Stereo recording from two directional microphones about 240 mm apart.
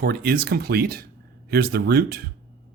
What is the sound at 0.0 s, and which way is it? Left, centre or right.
Speech, right.